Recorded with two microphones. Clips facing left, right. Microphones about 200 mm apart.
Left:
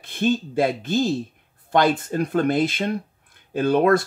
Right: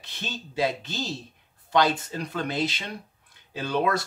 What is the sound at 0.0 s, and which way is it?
Speech, 50° left (ahead or behind).